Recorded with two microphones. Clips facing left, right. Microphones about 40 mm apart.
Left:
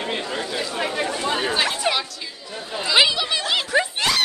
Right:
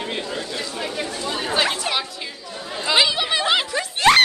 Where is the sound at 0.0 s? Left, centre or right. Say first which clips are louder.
Left 1 dB; centre.